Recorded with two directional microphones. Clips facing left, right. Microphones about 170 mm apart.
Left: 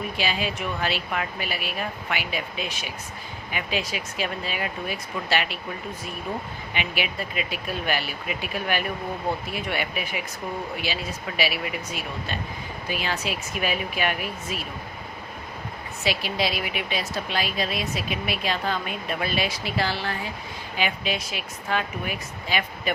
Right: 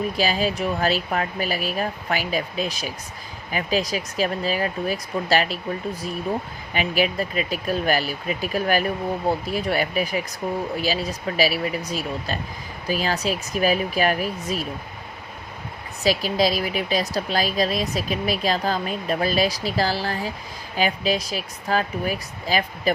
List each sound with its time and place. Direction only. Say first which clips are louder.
0.2 s speech: right 4 dB; 40° right (ahead or behind)
6.7 s speech: right 7 dB; 40° right (ahead or behind)
16.0 s speech: right 6 dB; 40° right (ahead or behind)